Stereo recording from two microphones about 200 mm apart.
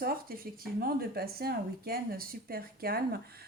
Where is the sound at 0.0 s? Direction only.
45° right (ahead or behind).